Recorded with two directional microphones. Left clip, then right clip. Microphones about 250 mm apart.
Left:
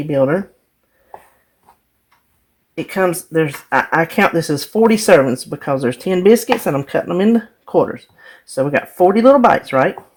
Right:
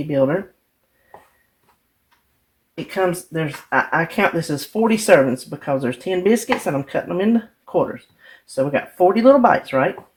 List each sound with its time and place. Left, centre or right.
0.1 s speech: left
2.7 s speech: left